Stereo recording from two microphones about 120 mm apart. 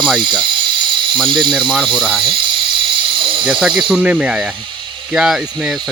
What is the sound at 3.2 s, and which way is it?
Dental drill, 45° right (ahead or behind).